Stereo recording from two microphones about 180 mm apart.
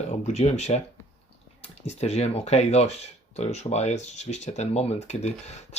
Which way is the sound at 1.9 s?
35° left (ahead or behind).